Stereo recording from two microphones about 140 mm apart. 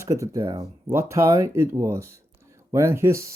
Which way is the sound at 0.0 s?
20° right (ahead or behind).